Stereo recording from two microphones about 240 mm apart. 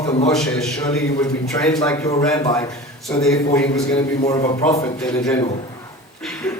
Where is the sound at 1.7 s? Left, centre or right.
Centre.